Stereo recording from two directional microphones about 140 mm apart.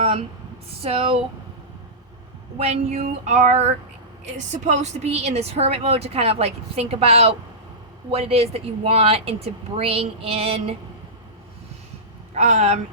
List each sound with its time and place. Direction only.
0.8 s a woman's voice: 45° right (ahead or behind)
2.6 s a woman's voice: 50° right (ahead or behind)
12.3 s a woman's voice: 50° right (ahead or behind)